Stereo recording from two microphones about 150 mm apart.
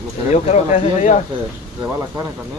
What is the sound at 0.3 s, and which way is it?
Speech, 50° left (ahead or behind).